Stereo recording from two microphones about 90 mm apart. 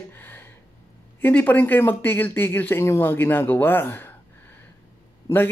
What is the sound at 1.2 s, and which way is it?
Speech, 20° left (ahead or behind).